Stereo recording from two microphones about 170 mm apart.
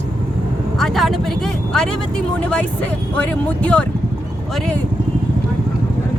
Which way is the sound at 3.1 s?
10° left (ahead or behind).